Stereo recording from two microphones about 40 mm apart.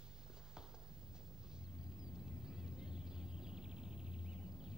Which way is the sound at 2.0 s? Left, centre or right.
Centre.